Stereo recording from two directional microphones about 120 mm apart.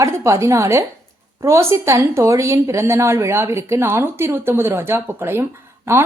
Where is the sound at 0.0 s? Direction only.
25° right (ahead or behind).